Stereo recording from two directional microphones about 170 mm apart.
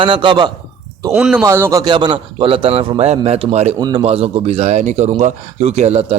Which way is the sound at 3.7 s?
25° right (ahead or behind).